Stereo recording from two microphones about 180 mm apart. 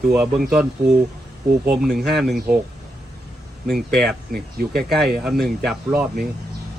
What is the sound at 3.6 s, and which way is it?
Speech, centre (ahead or behind).